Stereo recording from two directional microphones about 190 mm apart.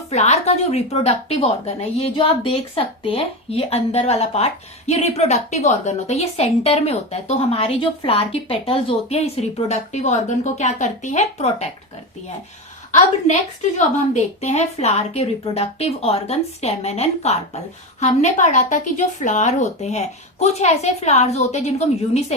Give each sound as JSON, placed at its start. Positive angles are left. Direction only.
{"t": 0.1, "sound": "a woman's voice", "side_deg": 35}
{"t": 13.7, "sound": "a woman's voice", "side_deg": 35}